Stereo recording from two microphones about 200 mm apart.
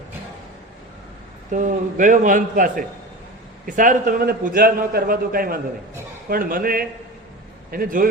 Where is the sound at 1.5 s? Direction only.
40° right (ahead or behind).